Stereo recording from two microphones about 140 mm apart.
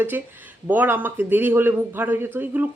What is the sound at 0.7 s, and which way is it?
Speech, 15° right (ahead or behind).